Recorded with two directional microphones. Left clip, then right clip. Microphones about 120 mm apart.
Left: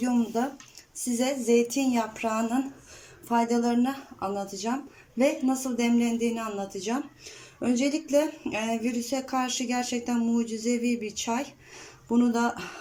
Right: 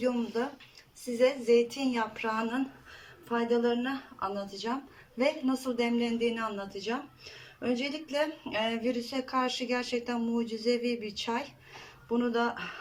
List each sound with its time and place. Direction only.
0.0 s speech: 25° left (ahead or behind)